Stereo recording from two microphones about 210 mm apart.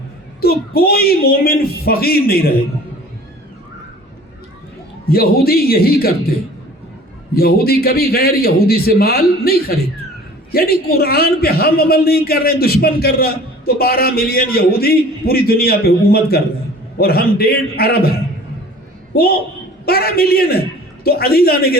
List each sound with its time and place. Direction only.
0.4 s a man's voice: 45° left (ahead or behind)
5.0 s a man's voice: 45° left (ahead or behind)
7.3 s a man's voice: 45° left (ahead or behind)
19.1 s a man's voice: 45° left (ahead or behind)